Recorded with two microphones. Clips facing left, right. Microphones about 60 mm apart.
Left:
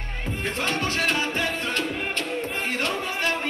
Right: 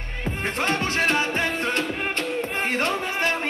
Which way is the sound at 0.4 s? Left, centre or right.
Right.